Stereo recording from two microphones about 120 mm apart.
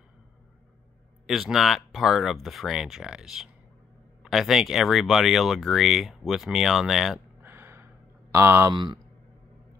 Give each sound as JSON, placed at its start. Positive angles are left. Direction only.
{"t": 1.2, "sound": "speech", "side_deg": 0}
{"t": 7.4, "sound": "gasp", "side_deg": -20}
{"t": 8.3, "sound": "speech", "side_deg": -20}
{"t": 8.7, "sound": "speech", "side_deg": -40}